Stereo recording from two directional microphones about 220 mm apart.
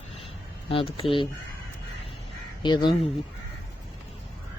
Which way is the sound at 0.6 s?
25° left (ahead or behind).